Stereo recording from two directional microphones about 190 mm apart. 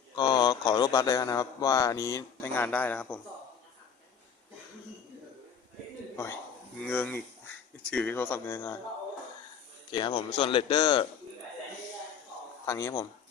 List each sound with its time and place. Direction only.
0.2 s speech: 25° left (ahead or behind); by 3.2 s 10° left (ahead or behind)
6.8 s speech: 10° left (ahead or behind)
9.9 s speech: 25° left (ahead or behind)
12.6 s speech: 15° left (ahead or behind)